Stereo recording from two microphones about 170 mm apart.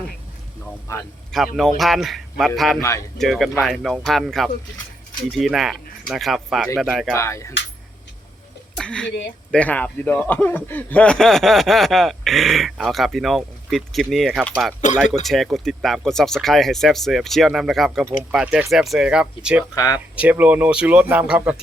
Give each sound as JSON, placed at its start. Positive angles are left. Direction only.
{"t": 0.9, "sound": "speech", "side_deg": 20}
{"t": 1.5, "sound": "speech", "side_deg": 0}
{"t": 7.1, "sound": "speech", "side_deg": 15}
{"t": 8.8, "sound": "speech", "side_deg": 5}
{"t": 19.7, "sound": "speech", "side_deg": 20}
{"t": 20.1, "sound": "speech", "side_deg": -10}